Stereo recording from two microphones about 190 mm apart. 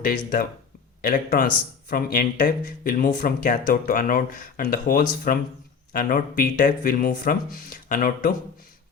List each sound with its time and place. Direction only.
0.0 s speech: 50° left (ahead or behind)